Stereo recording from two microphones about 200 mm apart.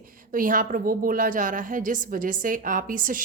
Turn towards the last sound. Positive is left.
turn(degrees=-45)  # may be behind; listen again after turning